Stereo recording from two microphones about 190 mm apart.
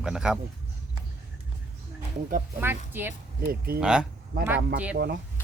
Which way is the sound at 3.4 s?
50° right (ahead or behind).